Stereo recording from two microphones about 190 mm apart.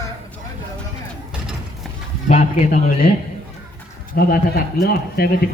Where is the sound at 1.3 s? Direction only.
5° right (ahead or behind).